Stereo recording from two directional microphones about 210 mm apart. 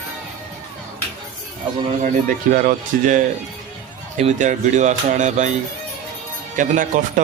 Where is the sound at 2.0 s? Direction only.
40° right (ahead or behind).